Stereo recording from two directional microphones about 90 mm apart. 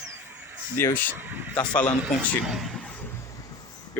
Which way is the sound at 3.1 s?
40° left (ahead or behind).